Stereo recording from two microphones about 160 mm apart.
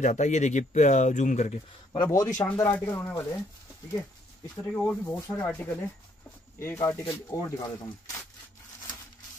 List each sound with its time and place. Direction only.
0.0 s speech: 50° left (ahead or behind)
1.9 s speech: 20° left (ahead or behind)
4.6 s speech: 10° left (ahead or behind)